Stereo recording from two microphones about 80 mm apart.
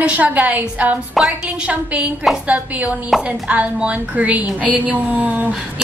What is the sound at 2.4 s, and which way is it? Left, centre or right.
A woman's voice, centre.